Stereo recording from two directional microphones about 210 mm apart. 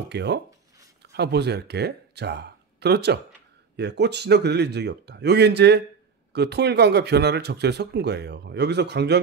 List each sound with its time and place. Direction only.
0.1 s speech: 55° right (ahead or behind)